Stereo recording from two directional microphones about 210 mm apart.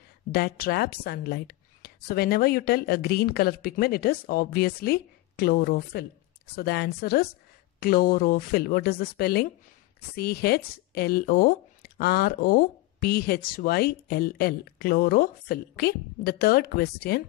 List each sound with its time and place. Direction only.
0.3 s speech: 45° left (ahead or behind)